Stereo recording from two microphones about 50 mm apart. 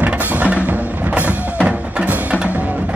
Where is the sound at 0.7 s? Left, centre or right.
Right.